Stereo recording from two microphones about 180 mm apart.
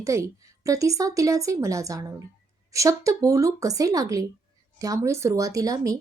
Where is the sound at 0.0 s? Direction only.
15° right (ahead or behind).